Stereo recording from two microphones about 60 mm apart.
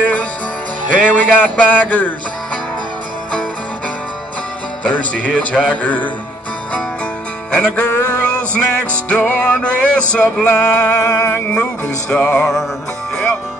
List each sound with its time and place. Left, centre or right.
0.0 s music: left
0.9 s speech: left
4.8 s music: left
7.7 s music: left
8.3 s music: left
10.4 s music: left
10.9 s music: left
11.5 s music: centre